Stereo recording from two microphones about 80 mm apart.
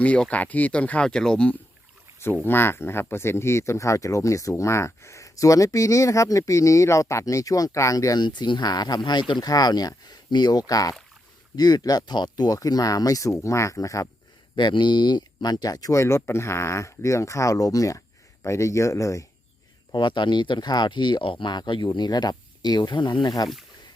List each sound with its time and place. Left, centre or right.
0.0 s speech: centre
2.1 s speech: left
9.0 s speech: left
9.5 s speech: left
14.5 s speech: left
16.0 s speech: left
19.9 s speech: left